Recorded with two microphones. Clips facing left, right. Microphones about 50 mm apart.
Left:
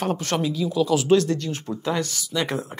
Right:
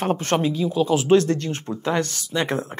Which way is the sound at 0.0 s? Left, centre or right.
Right.